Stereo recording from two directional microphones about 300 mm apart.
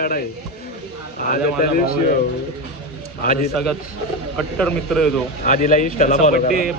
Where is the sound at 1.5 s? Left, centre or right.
Left.